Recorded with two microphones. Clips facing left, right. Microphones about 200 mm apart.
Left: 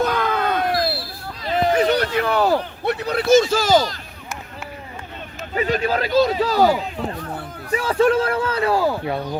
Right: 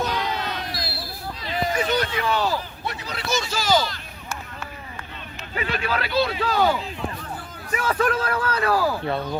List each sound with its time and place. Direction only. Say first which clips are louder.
0.0 s crowd: left 6 dB; 55° left (ahead or behind)
1.4 s a sound: left 7 dB; 55° left (ahead or behind)
2.1 s speech: left 5 dB; 60° left (ahead or behind); by 4.0 s 45° left (ahead or behind)
5.5 s a man's voice: left 6 dB; 40° left (ahead or behind); by 9.0 s 25° left (ahead or behind)
9.0 s speech: left 1 dB; 15° left (ahead or behind)